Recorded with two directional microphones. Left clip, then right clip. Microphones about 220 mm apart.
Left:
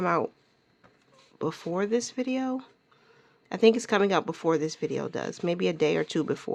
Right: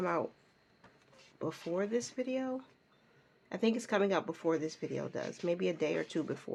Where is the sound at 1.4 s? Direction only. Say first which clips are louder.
Left 6 dB; 45° left (ahead or behind).